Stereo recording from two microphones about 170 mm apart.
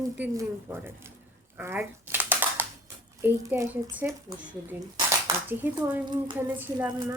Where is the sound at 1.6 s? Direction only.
10° right (ahead or behind).